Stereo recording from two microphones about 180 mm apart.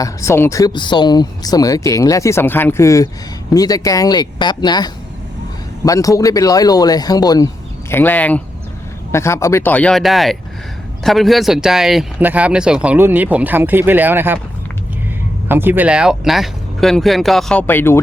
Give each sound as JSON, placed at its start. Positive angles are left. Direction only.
{"t": 0.0, "sound": "speech", "side_deg": 15}
{"t": 15.4, "sound": "speech", "side_deg": -10}